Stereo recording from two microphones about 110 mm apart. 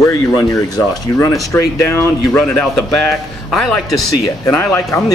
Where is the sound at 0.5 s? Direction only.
30° left (ahead or behind).